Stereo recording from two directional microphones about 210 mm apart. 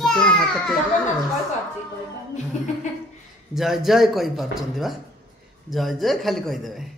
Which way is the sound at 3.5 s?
Centre (ahead or behind).